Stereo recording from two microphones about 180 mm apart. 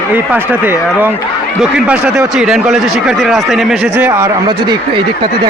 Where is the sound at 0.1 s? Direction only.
10° right (ahead or behind).